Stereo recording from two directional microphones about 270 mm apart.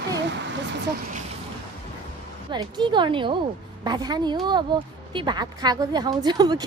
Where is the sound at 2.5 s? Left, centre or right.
Centre.